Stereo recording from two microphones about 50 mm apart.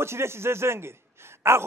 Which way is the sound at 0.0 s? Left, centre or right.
Right.